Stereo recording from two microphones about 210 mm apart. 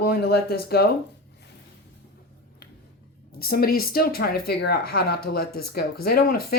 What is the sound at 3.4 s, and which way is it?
Speech, 45° left (ahead or behind).